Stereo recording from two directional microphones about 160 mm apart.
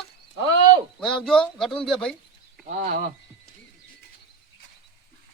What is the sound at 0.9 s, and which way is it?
Speech, 5° left (ahead or behind).